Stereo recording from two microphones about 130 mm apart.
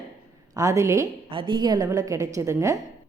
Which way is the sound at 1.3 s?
35° right (ahead or behind).